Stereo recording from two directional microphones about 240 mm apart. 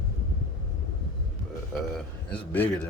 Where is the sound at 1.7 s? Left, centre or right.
Centre.